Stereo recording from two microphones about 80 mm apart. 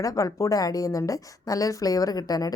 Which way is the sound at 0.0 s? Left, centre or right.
Left.